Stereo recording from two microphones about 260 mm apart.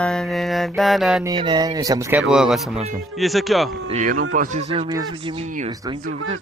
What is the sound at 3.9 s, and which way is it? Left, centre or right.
Speech, right.